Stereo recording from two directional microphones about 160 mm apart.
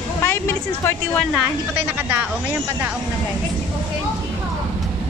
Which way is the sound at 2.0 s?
10° right (ahead or behind).